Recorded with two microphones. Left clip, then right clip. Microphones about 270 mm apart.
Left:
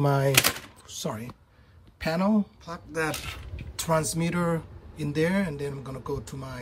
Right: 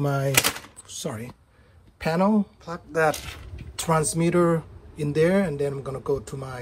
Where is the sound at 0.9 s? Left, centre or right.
Left.